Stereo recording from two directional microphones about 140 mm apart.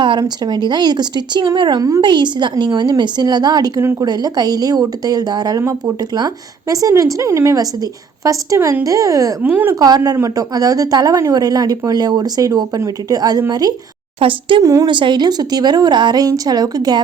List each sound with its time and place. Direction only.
0.0 s a woman's voice: 30° right (ahead or behind)
9.4 s a woman's voice: 15° right (ahead or behind)
9.8 s a woman's voice: 25° right (ahead or behind)
14.2 s speech: 40° right (ahead or behind)
14.6 s a woman's voice: 25° right (ahead or behind)
14.8 s a woman's voice: 35° right (ahead or behind)